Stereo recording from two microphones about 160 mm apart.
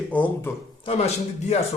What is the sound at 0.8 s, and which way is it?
Speech, 40° left (ahead or behind).